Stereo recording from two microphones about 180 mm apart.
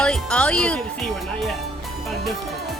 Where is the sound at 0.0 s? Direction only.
5° left (ahead or behind).